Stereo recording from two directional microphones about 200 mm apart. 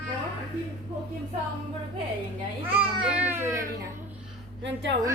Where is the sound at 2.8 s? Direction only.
5° right (ahead or behind).